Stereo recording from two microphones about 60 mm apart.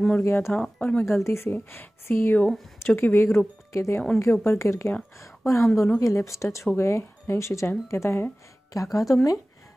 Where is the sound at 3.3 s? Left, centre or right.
Left.